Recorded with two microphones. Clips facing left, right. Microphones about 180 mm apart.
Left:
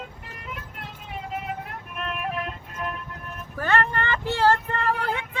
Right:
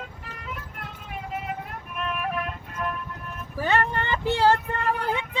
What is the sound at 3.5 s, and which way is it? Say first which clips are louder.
Vehicle: even; 15° right (ahead or behind).